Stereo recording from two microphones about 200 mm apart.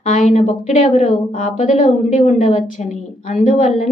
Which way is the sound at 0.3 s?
35° left (ahead or behind).